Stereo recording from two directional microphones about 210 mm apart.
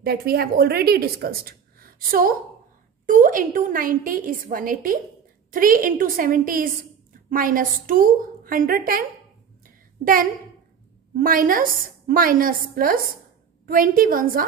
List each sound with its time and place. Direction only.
0.0 s a woman's voice: 45° right (ahead or behind)
11.1 s a woman's voice: 40° right (ahead or behind)